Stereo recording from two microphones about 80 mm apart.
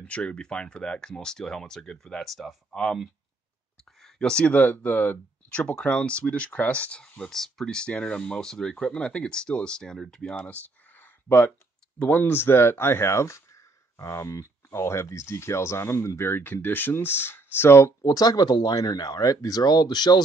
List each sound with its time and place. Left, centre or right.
0.0 s speech: centre
10.3 s computer keyboard: left
11.2 s speech: left
18.0 s speech: left